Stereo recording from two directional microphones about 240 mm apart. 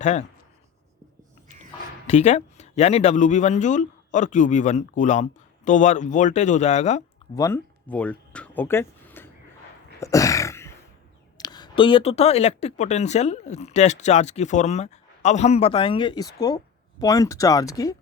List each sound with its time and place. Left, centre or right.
0.0 s speech: left
2.0 s speech: left
7.3 s a sound: centre
11.3 s speech: centre